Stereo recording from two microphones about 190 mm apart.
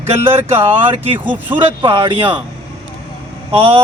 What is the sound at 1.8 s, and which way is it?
Speech, 25° right (ahead or behind).